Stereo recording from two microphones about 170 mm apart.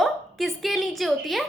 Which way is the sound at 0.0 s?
Centre (ahead or behind).